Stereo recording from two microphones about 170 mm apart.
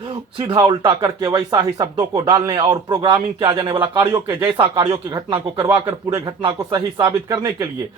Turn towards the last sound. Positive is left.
turn(degrees=-20)  # may be behind; listen again after turning